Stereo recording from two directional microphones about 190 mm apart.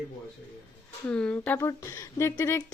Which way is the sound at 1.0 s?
5° left (ahead or behind).